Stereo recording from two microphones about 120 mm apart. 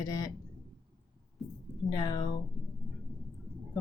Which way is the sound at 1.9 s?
35° left (ahead or behind).